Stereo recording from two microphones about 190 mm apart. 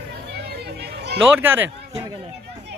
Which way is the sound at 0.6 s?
60° right (ahead or behind).